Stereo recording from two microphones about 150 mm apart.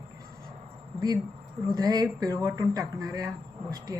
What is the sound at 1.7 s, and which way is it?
Speech, 25° right (ahead or behind).